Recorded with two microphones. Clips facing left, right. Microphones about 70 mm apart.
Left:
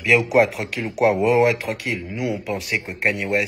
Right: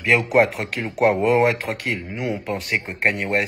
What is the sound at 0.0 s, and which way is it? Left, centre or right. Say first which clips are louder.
Speech: left 1 dB; right.